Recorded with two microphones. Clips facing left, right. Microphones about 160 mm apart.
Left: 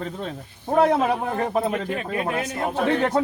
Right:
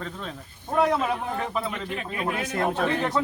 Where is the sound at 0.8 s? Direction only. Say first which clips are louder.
Left 4 dB; 50° left (ahead or behind).